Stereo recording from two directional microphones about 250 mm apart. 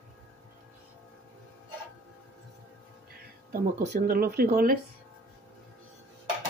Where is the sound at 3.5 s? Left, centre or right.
Right.